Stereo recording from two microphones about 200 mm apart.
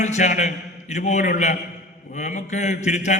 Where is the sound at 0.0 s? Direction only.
35° left (ahead or behind).